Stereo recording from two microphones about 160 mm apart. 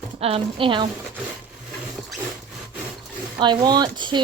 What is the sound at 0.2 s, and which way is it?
Speech, 35° right (ahead or behind).